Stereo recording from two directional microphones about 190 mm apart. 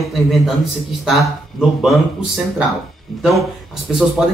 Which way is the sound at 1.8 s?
Centre (ahead or behind).